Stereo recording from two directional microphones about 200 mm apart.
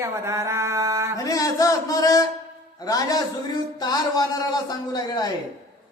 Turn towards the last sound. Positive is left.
turn(degrees=20)  # may be behind; listen again after turning